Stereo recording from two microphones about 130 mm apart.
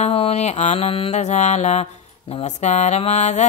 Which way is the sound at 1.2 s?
60° left (ahead or behind).